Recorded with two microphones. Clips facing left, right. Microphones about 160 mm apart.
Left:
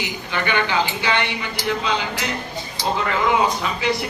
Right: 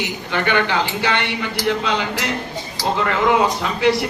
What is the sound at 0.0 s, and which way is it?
A woman's voice, 60° right (ahead or behind).